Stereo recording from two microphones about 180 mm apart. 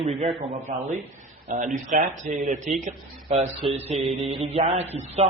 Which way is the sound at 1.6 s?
45° right (ahead or behind).